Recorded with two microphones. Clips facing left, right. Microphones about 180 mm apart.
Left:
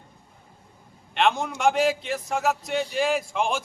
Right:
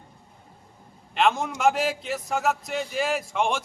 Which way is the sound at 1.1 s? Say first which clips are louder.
Even; centre (ahead or behind).